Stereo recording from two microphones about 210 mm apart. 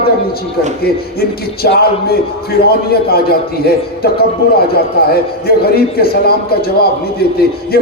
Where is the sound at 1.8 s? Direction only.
45° left (ahead or behind).